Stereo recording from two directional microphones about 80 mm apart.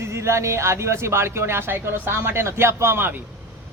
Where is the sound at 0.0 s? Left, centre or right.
Right.